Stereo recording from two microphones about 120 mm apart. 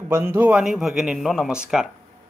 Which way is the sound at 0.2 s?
15° right (ahead or behind).